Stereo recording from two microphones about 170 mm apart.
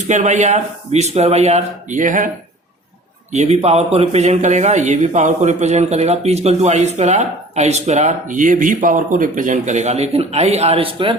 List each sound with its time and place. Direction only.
0.1 s speech: 45° right (ahead or behind)
3.3 s a man's voice: 40° right (ahead or behind)